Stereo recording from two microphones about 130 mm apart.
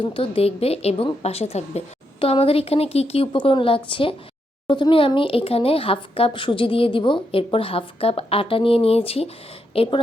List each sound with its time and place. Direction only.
0.0 s speech: 45° left (ahead or behind)